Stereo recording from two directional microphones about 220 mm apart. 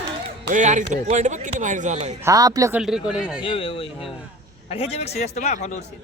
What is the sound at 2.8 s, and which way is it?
Speech, 5° right (ahead or behind).